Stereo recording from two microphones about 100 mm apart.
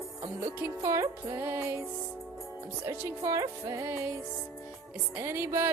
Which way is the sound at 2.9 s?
30° right (ahead or behind).